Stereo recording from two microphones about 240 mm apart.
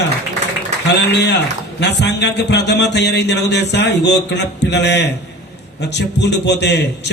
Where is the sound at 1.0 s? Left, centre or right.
Left.